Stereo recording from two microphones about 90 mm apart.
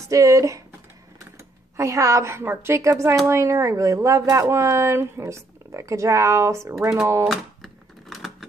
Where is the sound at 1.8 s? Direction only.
35° right (ahead or behind).